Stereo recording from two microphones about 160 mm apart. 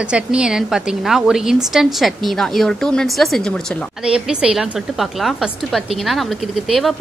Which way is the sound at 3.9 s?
5° right (ahead or behind).